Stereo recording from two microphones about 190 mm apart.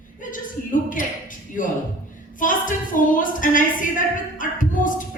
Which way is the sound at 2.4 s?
45° left (ahead or behind).